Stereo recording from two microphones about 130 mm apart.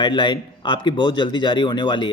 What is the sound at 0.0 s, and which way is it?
Speech, 35° left (ahead or behind).